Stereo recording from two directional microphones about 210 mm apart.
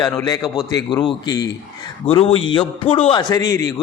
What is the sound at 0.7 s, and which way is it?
A man's voice, 20° left (ahead or behind).